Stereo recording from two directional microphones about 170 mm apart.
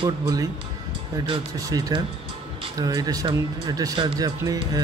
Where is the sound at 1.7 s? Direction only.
20° right (ahead or behind).